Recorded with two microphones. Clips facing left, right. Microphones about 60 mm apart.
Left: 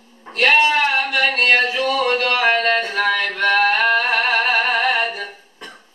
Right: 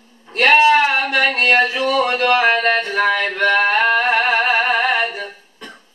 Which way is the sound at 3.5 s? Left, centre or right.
Centre.